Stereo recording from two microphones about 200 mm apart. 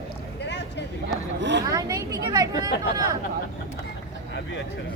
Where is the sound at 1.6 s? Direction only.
20° right (ahead or behind).